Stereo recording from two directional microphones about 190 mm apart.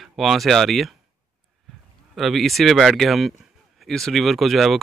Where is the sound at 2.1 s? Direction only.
Centre (ahead or behind).